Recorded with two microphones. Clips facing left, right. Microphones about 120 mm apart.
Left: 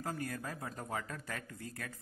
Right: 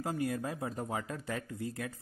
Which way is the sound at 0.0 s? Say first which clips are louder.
Right 6 dB; 20° right (ahead or behind).